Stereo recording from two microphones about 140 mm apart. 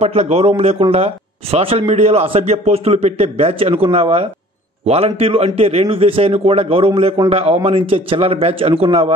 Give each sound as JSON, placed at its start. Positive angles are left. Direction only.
{"t": 0.0, "sound": "speech", "side_deg": -50}